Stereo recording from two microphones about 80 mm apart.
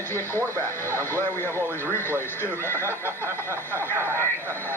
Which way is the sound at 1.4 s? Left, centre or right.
Right.